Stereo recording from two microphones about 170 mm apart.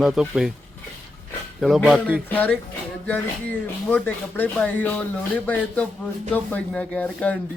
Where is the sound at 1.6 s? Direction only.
Centre (ahead or behind).